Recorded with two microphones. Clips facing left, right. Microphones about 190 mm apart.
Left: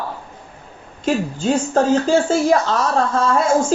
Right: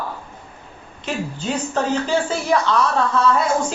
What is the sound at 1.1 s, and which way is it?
Speech, 45° left (ahead or behind).